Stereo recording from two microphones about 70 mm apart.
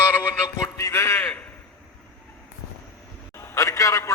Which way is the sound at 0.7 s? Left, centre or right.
Left.